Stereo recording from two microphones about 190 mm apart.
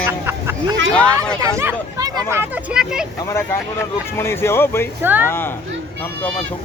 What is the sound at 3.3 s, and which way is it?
Speech, 15° left (ahead or behind).